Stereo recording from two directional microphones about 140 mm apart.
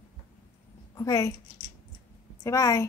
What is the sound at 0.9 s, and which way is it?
Speech, 25° left (ahead or behind).